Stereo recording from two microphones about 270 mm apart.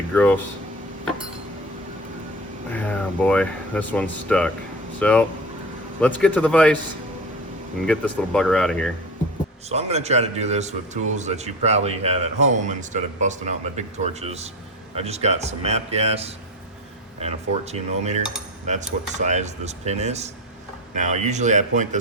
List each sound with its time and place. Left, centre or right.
0.1 s speech: centre
2.7 s speech: centre
7.9 s speech: centre
9.6 s a man's voice: right